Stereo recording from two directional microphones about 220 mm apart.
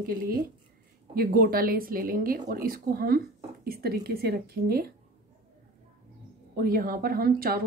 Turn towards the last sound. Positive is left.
turn(degrees=-40)  # may be behind; listen again after turning